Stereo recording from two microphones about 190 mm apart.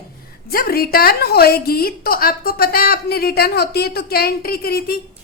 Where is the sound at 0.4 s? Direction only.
55° left (ahead or behind).